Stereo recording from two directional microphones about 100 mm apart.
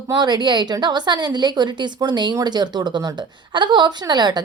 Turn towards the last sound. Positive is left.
turn(degrees=-45)  # may be behind; listen again after turning